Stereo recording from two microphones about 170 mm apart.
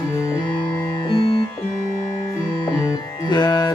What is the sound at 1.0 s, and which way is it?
Music, 30° left (ahead or behind).